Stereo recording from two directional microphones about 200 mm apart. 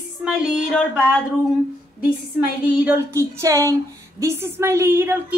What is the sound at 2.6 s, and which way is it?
A woman's voice, 10° right (ahead or behind).